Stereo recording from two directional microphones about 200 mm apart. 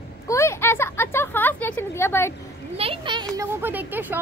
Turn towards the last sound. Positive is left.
turn(degrees=-10)  # may be behind; listen again after turning